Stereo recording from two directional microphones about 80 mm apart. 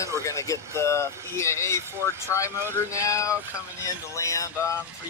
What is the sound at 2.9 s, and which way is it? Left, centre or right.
Speech, left.